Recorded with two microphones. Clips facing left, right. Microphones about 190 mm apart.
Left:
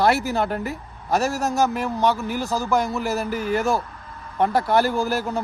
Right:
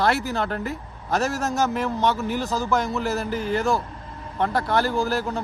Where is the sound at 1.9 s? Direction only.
5° left (ahead or behind).